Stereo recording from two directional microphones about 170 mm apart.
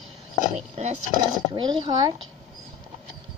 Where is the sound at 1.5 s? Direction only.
30° right (ahead or behind).